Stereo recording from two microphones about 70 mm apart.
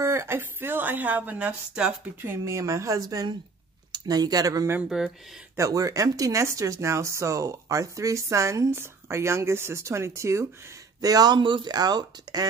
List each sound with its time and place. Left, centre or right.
0.0 s speech: right
2.4 s speech: right
3.1 s speech: right
4.8 s speech: centre
5.6 s speech: right
11.0 s speech: right